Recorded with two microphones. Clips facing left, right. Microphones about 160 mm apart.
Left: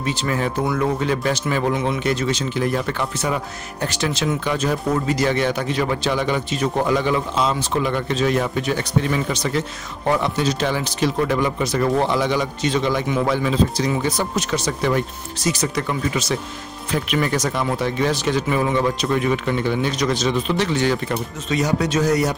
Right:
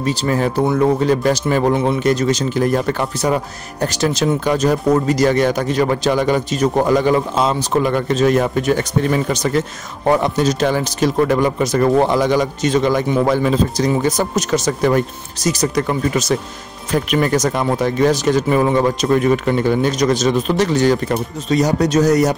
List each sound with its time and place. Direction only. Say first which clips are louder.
0.0 s speech: right 5 dB; 35° right (ahead or behind)